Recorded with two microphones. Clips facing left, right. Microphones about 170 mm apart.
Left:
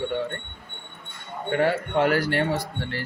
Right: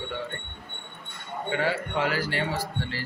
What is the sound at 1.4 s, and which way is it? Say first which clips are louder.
Speech: left 5 dB; 55° left (ahead or behind).